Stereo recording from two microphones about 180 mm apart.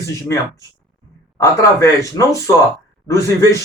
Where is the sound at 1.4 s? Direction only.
15° left (ahead or behind).